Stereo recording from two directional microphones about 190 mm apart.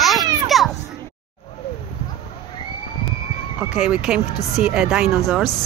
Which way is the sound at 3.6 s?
5° right (ahead or behind).